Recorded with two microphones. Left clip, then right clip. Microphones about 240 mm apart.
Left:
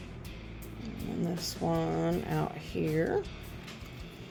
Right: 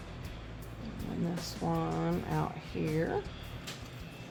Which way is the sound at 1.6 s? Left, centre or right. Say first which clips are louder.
Left 3 dB; centre.